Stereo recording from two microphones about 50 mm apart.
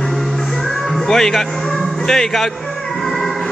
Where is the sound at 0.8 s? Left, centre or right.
Centre.